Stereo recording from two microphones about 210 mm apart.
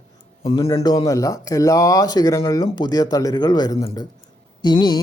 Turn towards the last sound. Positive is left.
turn(degrees=20)  # may be behind; listen again after turning